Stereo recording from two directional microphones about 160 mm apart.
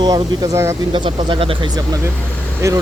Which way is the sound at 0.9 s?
30° right (ahead or behind).